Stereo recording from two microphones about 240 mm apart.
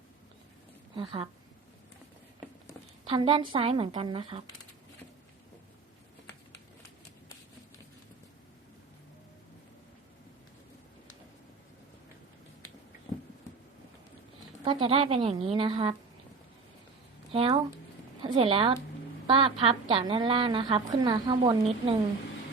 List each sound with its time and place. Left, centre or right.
0.9 s a woman's voice: right
3.0 s a woman's voice: centre
14.6 s a woman's voice: centre
17.3 s a woman's voice: right